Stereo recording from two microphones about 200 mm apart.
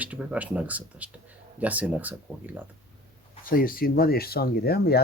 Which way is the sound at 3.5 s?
45° left (ahead or behind).